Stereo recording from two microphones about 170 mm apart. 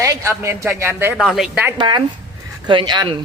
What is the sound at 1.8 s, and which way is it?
Speech, 25° right (ahead or behind).